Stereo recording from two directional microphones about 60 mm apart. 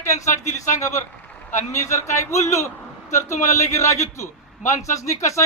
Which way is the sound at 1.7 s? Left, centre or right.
Left.